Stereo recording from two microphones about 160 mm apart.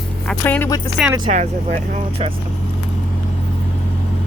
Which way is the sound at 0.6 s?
20° left (ahead or behind).